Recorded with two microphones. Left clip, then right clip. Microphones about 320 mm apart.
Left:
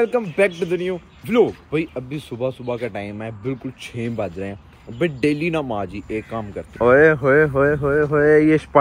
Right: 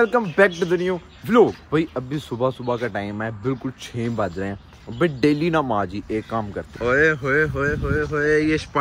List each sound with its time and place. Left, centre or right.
0.0 s a man's voice: right
5.2 s a man's voice: centre
5.5 s a man's voice: right
6.8 s speech: centre